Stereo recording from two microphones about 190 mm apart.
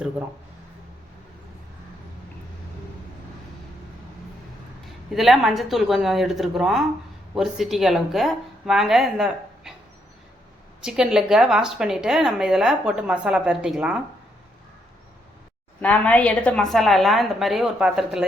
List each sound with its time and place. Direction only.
5.1 s a woman's voice: centre (ahead or behind)
10.8 s a woman's voice: 5° right (ahead or behind)
15.8 s a woman's voice: 5° left (ahead or behind)